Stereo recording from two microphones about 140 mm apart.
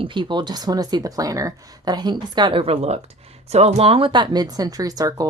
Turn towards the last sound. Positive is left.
turn(degrees=-25)  # may be behind; listen again after turning